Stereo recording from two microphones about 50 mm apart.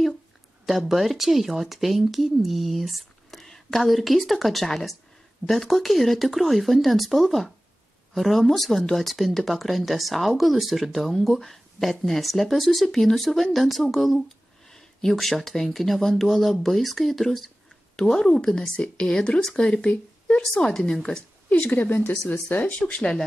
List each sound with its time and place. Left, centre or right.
0.7 s speech: centre
17.9 s speech: centre
21.5 s speech: left
22.7 s speech: left